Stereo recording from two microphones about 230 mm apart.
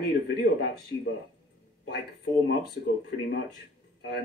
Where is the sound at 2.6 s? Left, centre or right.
Left.